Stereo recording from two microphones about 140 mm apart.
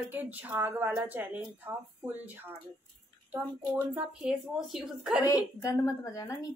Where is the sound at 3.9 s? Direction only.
10° right (ahead or behind).